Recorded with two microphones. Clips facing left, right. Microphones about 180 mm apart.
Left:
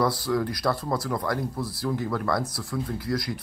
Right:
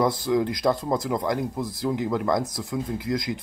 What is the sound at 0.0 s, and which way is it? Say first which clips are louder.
Speech: right 2 dB; 20° right (ahead or behind).